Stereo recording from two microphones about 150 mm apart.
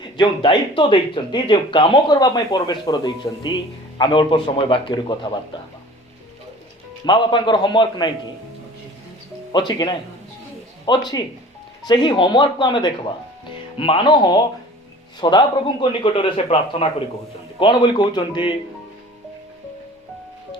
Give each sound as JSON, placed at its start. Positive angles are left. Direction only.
{"t": 0.0, "sound": "speech", "side_deg": 30}
{"t": 7.0, "sound": "speech", "side_deg": 30}
{"t": 9.5, "sound": "speech", "side_deg": 30}